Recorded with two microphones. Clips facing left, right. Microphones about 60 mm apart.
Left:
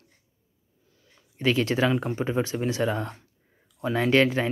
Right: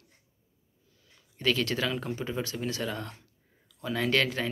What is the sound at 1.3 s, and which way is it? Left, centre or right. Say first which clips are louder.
Speech: left 4 dB; left.